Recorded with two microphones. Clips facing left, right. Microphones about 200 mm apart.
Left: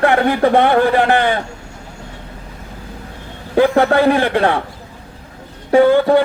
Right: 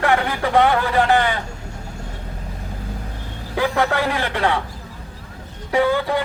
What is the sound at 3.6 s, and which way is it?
Speech, 55° left (ahead or behind).